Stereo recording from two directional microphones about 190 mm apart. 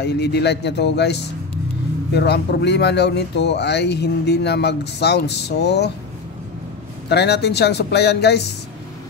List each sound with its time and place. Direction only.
0.0 s speech: 60° left (ahead or behind)
7.1 s speech: 60° left (ahead or behind)